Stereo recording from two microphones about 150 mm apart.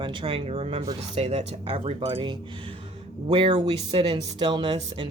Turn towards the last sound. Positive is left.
turn(degrees=-30)  # may be behind; listen again after turning